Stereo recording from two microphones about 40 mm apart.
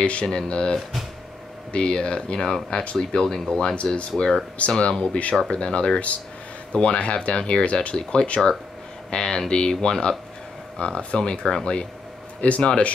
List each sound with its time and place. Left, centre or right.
0.0 s speech: left
3.0 s speech: centre